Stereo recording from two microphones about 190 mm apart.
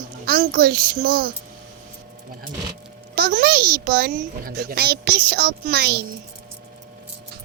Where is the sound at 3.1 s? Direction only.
55° right (ahead or behind).